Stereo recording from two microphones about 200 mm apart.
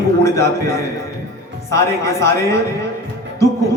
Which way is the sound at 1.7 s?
15° left (ahead or behind).